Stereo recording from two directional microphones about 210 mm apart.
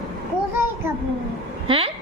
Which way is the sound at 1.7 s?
25° right (ahead or behind).